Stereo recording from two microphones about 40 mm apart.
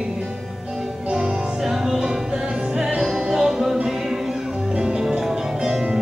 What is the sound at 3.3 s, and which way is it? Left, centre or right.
Music, centre.